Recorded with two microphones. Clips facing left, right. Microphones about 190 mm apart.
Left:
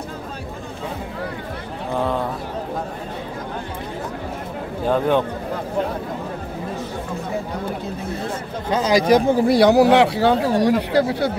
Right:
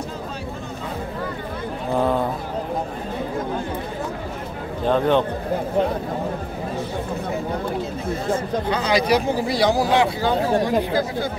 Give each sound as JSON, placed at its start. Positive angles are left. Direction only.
{"t": 4.8, "sound": "speech", "side_deg": 10}
{"t": 8.6, "sound": "speech", "side_deg": 45}